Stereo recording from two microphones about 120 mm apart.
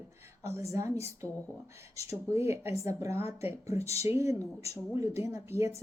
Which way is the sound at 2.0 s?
25° right (ahead or behind).